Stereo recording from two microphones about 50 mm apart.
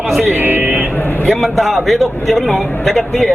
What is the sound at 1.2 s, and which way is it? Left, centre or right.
A man's voice, centre.